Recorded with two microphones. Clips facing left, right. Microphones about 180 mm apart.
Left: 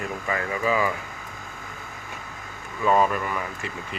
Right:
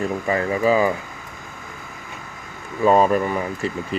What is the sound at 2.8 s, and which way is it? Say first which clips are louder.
Speech: right 6 dB; 35° right (ahead or behind).